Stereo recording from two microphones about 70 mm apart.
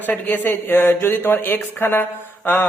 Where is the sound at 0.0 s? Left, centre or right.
Left.